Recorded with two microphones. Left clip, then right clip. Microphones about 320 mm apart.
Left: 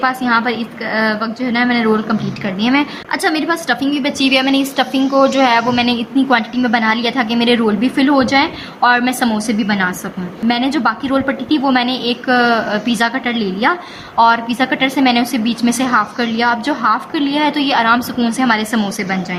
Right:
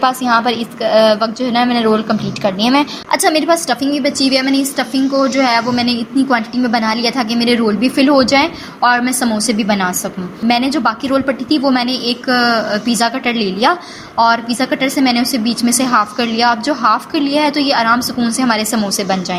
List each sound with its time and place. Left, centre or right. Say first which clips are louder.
0.0 s a woman's voice: right 2 dB; centre